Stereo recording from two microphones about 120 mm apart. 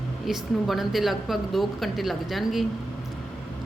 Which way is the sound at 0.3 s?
Centre (ahead or behind).